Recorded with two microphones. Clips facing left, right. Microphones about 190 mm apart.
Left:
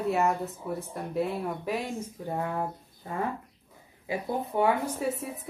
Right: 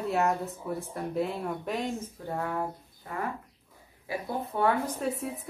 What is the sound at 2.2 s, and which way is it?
Speech, 20° left (ahead or behind).